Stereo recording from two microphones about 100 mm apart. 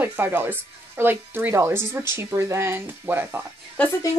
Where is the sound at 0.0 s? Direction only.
20° right (ahead or behind).